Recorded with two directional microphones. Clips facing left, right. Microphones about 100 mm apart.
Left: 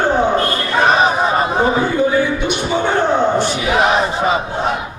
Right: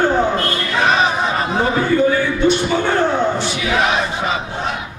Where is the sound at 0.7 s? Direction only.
30° left (ahead or behind).